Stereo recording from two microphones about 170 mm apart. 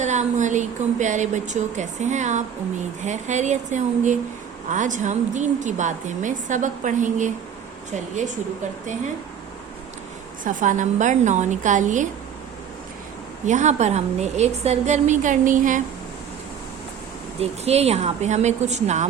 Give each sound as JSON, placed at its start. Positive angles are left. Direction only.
{"t": 0.0, "sound": "a woman's voice", "side_deg": -45}
{"t": 10.4, "sound": "a woman's voice", "side_deg": -50}
{"t": 13.4, "sound": "a woman's voice", "side_deg": -45}
{"t": 17.4, "sound": "a woman's voice", "side_deg": -40}